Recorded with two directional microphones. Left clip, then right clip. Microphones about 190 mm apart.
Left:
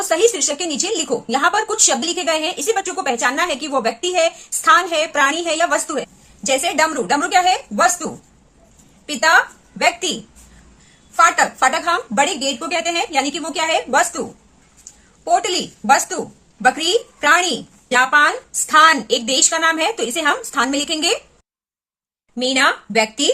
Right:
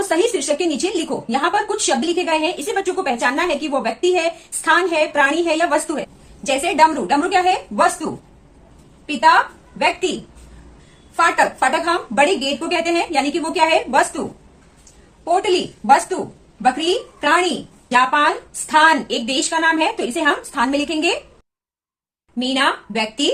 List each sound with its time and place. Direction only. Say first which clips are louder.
0.0 s a woman's voice: left 2 dB; 25° left (ahead or behind)
11.1 s a woman's voice: left 2 dB; 30° left (ahead or behind)
15.2 s a woman's voice: left 1 dB; 35° left (ahead or behind)
16.6 s speech: left 2 dB; 35° left (ahead or behind)
22.4 s speech: left 2 dB; 35° left (ahead or behind)